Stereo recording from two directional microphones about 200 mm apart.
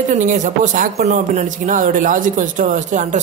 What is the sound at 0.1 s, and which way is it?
Speech, 40° right (ahead or behind).